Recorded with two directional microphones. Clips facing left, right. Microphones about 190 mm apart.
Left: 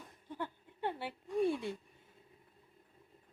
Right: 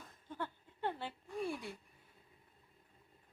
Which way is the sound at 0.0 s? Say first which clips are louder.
Left 2 dB; 15° left (ahead or behind).